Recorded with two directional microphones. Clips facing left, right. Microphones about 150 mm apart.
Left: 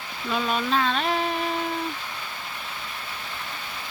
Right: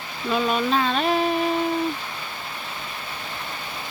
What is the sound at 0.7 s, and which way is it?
Music, 5° right (ahead or behind).